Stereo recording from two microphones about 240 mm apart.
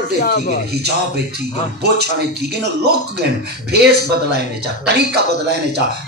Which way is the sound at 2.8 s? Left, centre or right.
Right.